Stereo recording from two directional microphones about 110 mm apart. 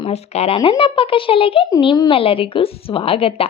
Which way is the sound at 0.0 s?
70° left (ahead or behind).